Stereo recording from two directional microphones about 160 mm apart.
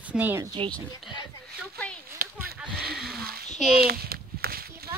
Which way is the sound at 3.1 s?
70° right (ahead or behind).